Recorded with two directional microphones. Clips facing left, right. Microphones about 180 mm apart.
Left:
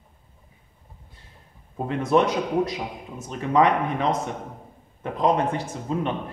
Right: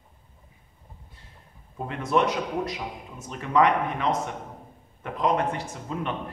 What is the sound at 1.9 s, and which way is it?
A man's voice, 30° left (ahead or behind).